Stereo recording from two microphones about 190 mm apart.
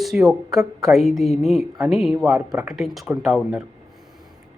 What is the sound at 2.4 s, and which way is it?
Speech, 20° right (ahead or behind).